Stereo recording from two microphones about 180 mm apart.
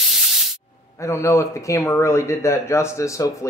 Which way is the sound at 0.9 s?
15° left (ahead or behind).